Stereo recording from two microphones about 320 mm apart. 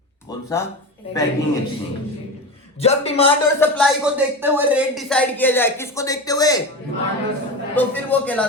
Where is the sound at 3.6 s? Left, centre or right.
Centre.